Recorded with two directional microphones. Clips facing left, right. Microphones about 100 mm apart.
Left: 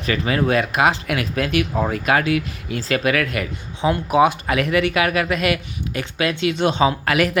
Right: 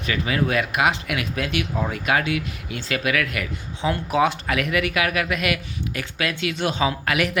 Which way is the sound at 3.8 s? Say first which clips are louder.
Left 4 dB; 20° left (ahead or behind).